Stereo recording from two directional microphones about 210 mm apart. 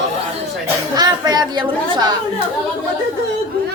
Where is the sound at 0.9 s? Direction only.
20° right (ahead or behind).